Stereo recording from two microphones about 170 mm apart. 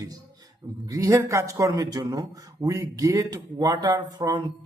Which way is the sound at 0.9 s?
20° right (ahead or behind).